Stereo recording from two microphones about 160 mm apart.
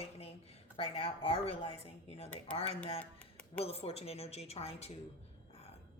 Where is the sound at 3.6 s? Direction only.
40° left (ahead or behind).